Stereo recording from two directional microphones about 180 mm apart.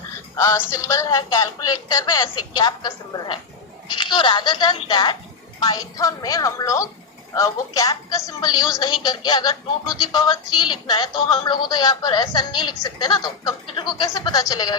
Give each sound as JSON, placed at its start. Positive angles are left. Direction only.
{"t": 0.3, "sound": "music", "side_deg": 15}
{"t": 0.7, "sound": "a woman's voice", "side_deg": 15}